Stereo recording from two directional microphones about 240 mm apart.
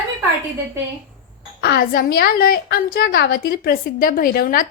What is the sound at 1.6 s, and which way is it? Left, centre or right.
A woman's voice, left.